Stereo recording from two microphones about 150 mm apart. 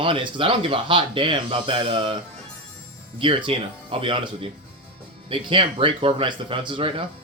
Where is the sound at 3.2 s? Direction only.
35° right (ahead or behind).